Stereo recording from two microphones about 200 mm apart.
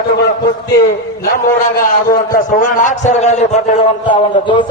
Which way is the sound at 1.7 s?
45° left (ahead or behind).